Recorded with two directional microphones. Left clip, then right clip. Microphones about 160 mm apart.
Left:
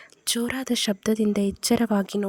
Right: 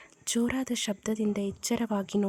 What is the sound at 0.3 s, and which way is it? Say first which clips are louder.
A woman's voice: left 4 dB; 35° left (ahead or behind).